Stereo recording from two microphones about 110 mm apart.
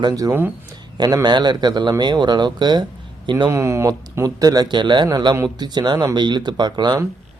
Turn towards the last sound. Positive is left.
turn(degrees=-40)  # may be behind; listen again after turning